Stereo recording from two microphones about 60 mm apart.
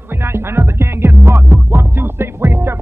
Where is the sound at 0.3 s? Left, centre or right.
Right.